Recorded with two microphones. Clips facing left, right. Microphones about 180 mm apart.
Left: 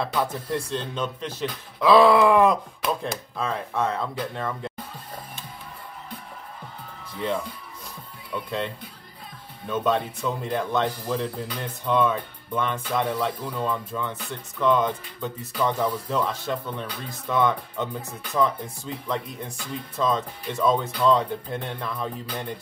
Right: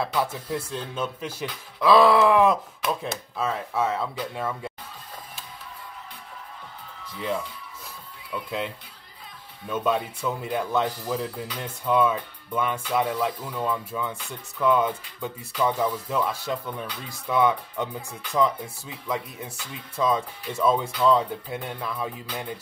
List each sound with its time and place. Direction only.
0.0 s speech: 5° right (ahead or behind)
8.3 s speech: 5° right (ahead or behind)
19.5 s speech: 50° left (ahead or behind)
20.0 s speech: 10° right (ahead or behind)